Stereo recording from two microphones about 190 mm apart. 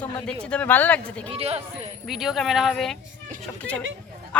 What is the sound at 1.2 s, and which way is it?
Speech, 30° right (ahead or behind).